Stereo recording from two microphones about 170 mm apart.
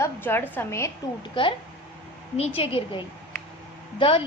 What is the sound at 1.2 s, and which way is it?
A woman's voice, 30° left (ahead or behind).